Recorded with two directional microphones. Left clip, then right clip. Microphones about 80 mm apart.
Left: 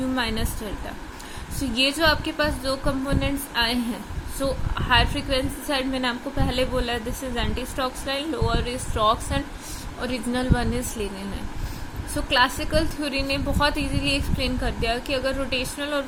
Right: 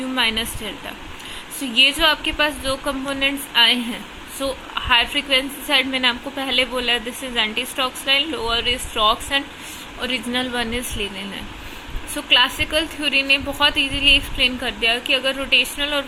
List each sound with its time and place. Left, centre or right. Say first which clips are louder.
0.2 s a woman's voice: right 11 dB; left
2.0 s a woman's voice: right 4 dB; left
12.1 s a woman's voice: right 5 dB; left